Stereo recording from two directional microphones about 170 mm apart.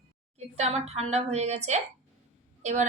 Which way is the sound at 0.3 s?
40° right (ahead or behind).